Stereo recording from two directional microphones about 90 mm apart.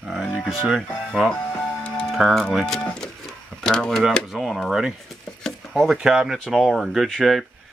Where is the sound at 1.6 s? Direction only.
10° left (ahead or behind).